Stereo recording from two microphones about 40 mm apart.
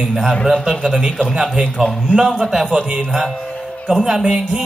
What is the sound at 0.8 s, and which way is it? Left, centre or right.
Music, centre.